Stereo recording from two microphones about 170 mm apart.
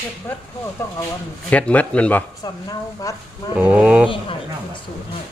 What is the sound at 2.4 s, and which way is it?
Speech, 20° left (ahead or behind).